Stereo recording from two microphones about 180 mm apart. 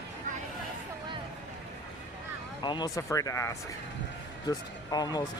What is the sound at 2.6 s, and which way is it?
Speech, 25° left (ahead or behind).